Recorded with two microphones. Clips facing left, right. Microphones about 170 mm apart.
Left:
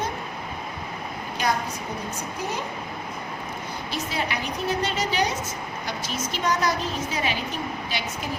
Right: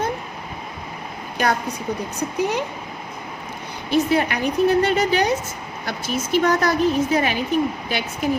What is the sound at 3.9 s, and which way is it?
A woman's voice, 55° right (ahead or behind).